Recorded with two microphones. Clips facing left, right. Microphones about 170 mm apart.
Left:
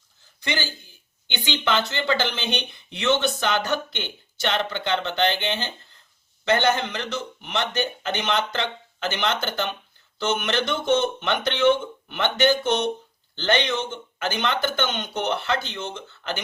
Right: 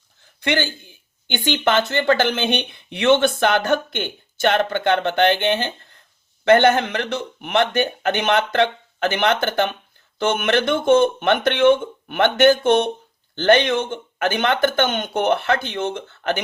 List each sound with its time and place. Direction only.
0.4 s a man's voice: 60° right (ahead or behind)